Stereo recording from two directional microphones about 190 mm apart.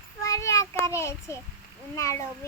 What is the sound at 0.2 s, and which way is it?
Child singing, 15° left (ahead or behind).